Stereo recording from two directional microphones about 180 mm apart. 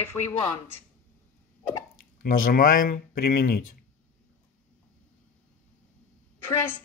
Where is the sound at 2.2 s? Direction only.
50° left (ahead or behind).